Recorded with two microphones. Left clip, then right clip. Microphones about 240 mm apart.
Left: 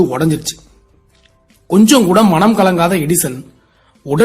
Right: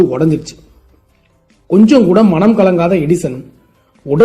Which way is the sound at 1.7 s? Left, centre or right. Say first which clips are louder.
Right 1 dB; left.